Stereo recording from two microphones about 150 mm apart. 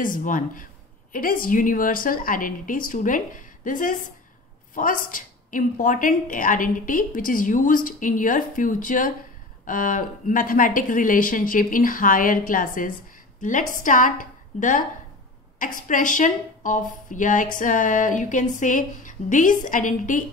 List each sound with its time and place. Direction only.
0.0 s a woman's voice: 65° left (ahead or behind)